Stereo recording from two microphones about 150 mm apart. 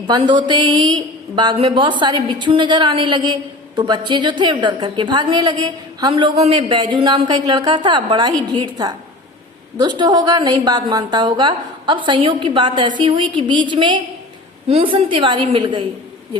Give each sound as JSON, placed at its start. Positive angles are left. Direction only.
{"t": 0.1, "sound": "a woman's voice", "side_deg": -30}